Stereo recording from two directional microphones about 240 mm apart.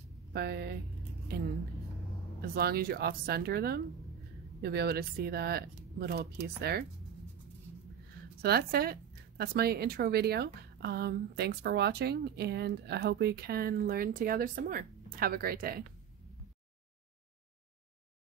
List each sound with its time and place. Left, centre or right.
0.3 s speech: right
8.4 s speech: right